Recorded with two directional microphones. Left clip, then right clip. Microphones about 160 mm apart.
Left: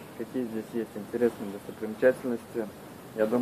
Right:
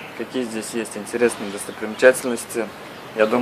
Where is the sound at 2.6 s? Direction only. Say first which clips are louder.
Right 9 dB; 25° right (ahead or behind).